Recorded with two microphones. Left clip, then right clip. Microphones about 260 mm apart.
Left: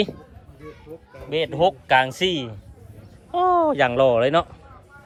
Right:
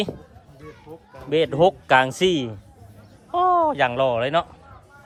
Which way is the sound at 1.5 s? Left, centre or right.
Right.